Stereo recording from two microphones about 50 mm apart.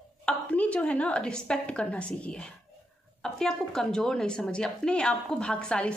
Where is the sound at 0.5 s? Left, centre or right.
Left.